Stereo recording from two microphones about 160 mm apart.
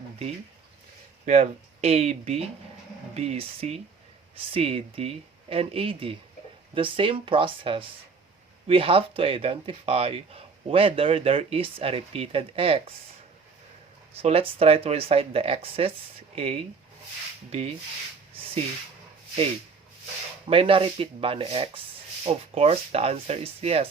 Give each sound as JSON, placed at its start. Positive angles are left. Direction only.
{"t": 1.2, "sound": "speech", "side_deg": -45}
{"t": 14.2, "sound": "speech", "side_deg": -35}
{"t": 20.5, "sound": "speech", "side_deg": -35}